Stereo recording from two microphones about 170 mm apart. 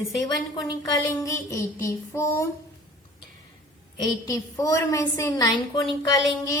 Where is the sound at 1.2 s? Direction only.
15° left (ahead or behind).